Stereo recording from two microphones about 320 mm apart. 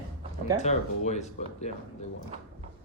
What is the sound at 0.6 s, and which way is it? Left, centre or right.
Speech, left.